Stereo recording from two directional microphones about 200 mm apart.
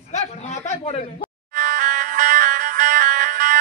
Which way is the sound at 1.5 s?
40° right (ahead or behind).